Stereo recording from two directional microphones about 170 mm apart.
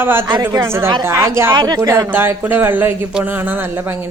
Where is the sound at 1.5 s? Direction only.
25° right (ahead or behind).